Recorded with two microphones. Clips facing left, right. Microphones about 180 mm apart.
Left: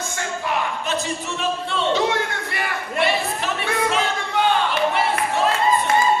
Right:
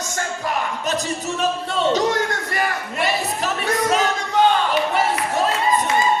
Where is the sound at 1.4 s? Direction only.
40° right (ahead or behind).